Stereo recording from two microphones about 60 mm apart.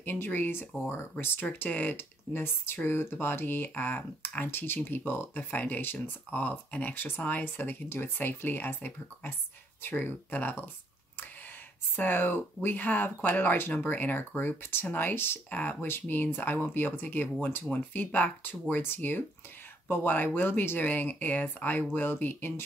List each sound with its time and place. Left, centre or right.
0.0 s speech: left
11.9 s speech: left